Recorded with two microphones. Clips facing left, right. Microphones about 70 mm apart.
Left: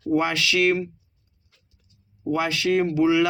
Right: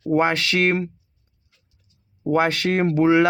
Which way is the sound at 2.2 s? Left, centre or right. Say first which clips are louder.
Right 4 dB; right.